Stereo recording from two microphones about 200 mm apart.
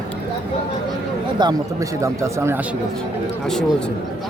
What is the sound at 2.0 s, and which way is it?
Speech, 15° right (ahead or behind).